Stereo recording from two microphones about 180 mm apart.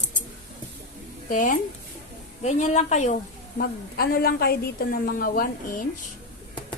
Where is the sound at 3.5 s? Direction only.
60° left (ahead or behind).